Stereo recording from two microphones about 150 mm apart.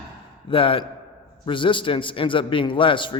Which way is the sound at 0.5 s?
35° left (ahead or behind).